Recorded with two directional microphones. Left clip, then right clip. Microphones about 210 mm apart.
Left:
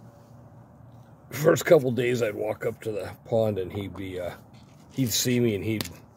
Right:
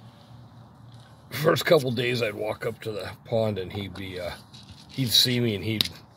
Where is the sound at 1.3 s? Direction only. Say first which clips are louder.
Left 1 dB; 15° left (ahead or behind).